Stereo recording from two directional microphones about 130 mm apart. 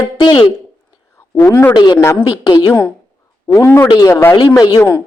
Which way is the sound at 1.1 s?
20° left (ahead or behind).